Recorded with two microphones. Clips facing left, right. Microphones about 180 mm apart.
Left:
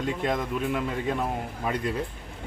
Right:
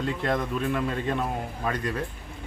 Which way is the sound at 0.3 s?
10° left (ahead or behind).